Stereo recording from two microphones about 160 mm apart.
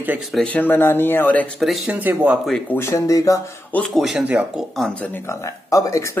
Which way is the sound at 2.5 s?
15° left (ahead or behind).